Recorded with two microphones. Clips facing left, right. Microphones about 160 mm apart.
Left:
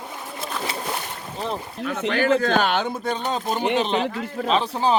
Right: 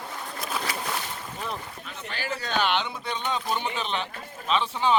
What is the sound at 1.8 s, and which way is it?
A man's voice, 85° left.